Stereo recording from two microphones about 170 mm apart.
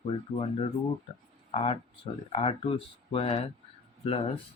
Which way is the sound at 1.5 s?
35° left (ahead or behind).